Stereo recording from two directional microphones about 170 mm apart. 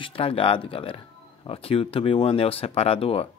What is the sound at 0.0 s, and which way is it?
Speech, 30° left (ahead or behind).